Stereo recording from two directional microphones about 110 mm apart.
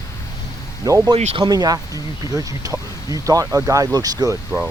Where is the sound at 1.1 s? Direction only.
70° right (ahead or behind).